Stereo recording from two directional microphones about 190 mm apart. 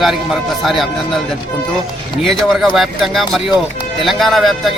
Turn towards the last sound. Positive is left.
turn(degrees=0)  # may be behind; listen again after turning